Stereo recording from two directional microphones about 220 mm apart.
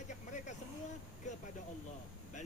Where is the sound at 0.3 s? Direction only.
35° left (ahead or behind).